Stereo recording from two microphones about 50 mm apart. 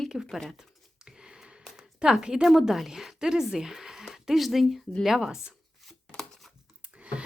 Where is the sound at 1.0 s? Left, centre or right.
Centre.